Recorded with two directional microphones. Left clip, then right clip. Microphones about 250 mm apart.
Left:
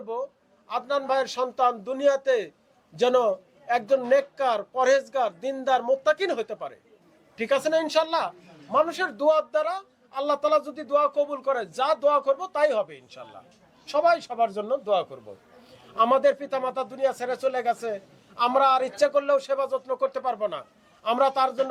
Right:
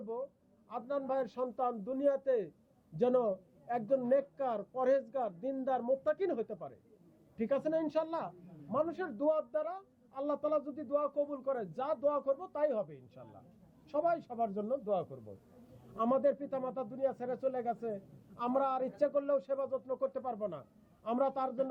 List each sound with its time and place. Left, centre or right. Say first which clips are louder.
0.0 s a man's voice: left 9 dB; centre
0.7 s a man's voice: left 11 dB; centre